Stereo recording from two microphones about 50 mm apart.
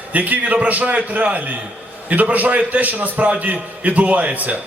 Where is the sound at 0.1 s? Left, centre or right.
Right.